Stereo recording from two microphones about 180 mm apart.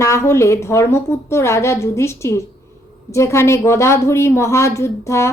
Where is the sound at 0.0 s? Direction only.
15° left (ahead or behind).